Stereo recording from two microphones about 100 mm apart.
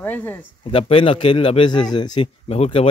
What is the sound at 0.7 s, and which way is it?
A man's voice, 65° left (ahead or behind).